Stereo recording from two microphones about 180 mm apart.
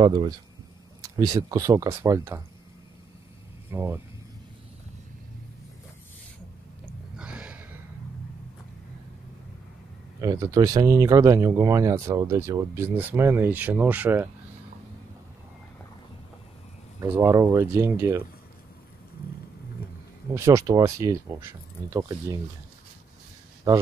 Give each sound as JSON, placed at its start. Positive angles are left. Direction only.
{"t": 0.0, "sound": "speech", "side_deg": -25}
{"t": 3.7, "sound": "speech", "side_deg": -10}
{"t": 7.2, "sound": "a sound", "side_deg": -5}
{"t": 10.2, "sound": "speech", "side_deg": -15}
{"t": 17.0, "sound": "speech", "side_deg": -15}
{"t": 20.3, "sound": "speech", "side_deg": -15}
{"t": 23.7, "sound": "speech", "side_deg": -20}